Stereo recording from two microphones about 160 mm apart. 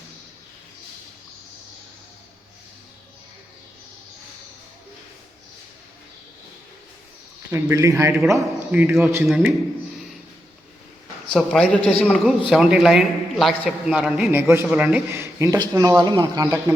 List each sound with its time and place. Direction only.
7.5 s a man's voice: 20° right (ahead or behind)
11.3 s a man's voice: 5° left (ahead or behind); by 16.7 s 20° right (ahead or behind)